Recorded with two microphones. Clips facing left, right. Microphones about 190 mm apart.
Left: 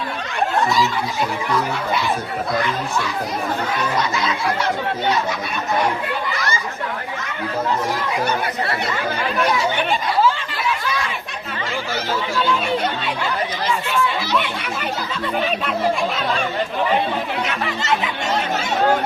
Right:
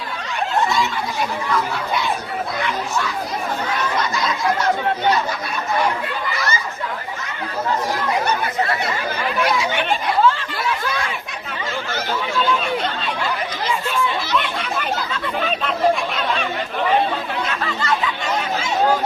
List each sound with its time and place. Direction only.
17.4 s chatter: 15° left (ahead or behind)